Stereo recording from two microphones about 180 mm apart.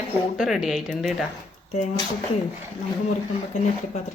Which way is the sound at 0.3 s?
Centre (ahead or behind).